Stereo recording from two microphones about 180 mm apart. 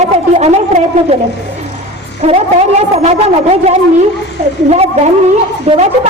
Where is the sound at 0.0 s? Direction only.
40° right (ahead or behind).